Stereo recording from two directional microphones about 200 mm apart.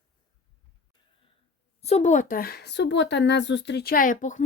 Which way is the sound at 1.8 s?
35° left (ahead or behind).